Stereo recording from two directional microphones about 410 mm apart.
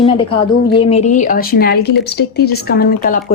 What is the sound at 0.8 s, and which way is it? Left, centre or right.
Speech, centre.